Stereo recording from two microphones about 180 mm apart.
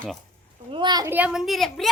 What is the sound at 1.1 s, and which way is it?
Speech, 5° right (ahead or behind).